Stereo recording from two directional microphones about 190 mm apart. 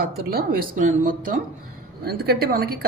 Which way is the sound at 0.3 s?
50° right (ahead or behind).